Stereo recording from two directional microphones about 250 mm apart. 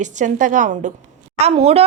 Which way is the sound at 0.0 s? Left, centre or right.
Right.